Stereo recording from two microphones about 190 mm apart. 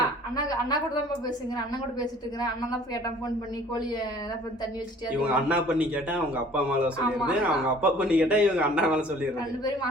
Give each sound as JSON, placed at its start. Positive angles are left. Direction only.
{"t": 0.3, "sound": "a woman's voice", "side_deg": 20}
{"t": 5.2, "sound": "a man's voice", "side_deg": -5}